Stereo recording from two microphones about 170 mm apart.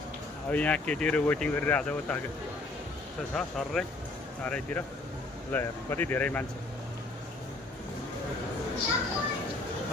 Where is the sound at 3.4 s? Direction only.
Centre (ahead or behind).